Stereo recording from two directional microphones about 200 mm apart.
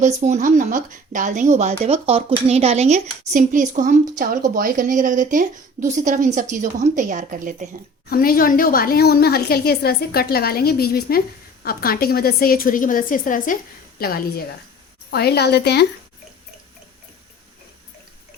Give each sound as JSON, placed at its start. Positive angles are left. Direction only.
{"t": 0.0, "sound": "speech", "side_deg": -35}
{"t": 8.1, "sound": "a woman's voice", "side_deg": 45}